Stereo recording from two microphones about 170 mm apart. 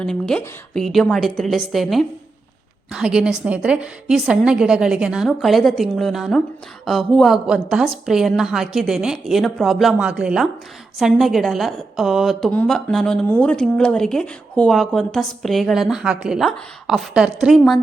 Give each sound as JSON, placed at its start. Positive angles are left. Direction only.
{"t": 0.0, "sound": "a woman's voice", "side_deg": 5}